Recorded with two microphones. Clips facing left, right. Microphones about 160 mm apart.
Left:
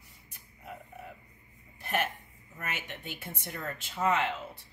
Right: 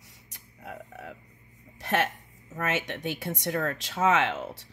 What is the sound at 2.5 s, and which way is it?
Speech, 85° right.